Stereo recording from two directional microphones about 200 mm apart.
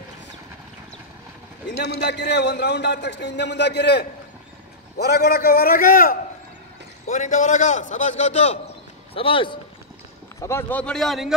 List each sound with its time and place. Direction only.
2.0 s a man's voice: 60° left (ahead or behind); by 9.6 s 25° left (ahead or behind)
10.4 s a man's voice: 10° left (ahead or behind)